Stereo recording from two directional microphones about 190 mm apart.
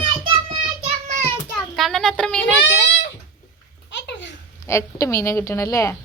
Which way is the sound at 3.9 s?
70° left (ahead or behind).